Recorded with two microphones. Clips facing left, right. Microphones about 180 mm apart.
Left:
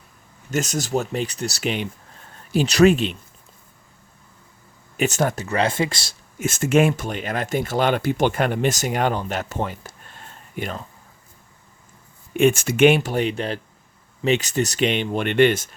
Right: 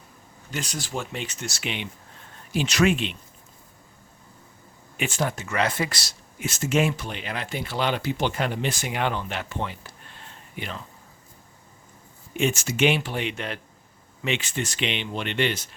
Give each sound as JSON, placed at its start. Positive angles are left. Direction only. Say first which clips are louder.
{"t": 0.5, "sound": "speech", "louder": "left 9 dB", "side_deg": 45}
{"t": 4.9, "sound": "speech", "louder": "left 6 dB", "side_deg": 40}
{"t": 6.4, "sound": "speech", "louder": "left 6 dB", "side_deg": 50}
{"t": 12.3, "sound": "speech", "louder": "left 8 dB", "side_deg": 55}